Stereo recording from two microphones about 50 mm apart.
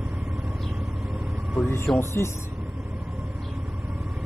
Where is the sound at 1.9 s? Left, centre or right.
Left.